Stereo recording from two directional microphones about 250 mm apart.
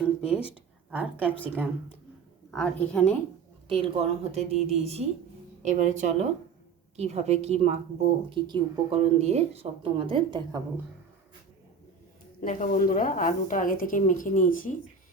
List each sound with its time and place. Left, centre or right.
0.2 s a sound: centre
0.9 s a woman's voice: centre
1.4 s a woman's voice: centre
3.7 s a woman's voice: right
12.4 s a woman's voice: left